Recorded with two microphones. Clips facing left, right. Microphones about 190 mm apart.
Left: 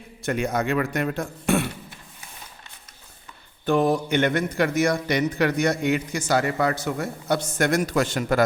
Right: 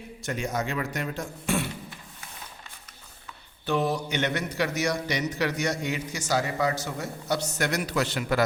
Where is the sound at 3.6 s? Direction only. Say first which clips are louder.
Left 6 dB; 50° left (ahead or behind).